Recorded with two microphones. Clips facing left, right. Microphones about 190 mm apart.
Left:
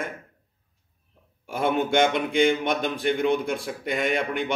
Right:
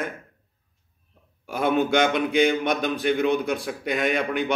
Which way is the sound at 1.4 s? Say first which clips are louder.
Right 2 dB; 25° left (ahead or behind).